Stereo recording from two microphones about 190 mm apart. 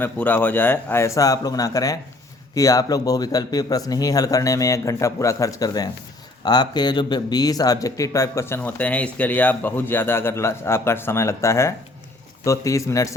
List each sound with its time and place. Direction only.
0.0 s a man's voice: 10° left (ahead or behind)